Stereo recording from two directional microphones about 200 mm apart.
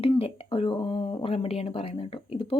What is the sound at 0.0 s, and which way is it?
A woman's voice, 30° left (ahead or behind).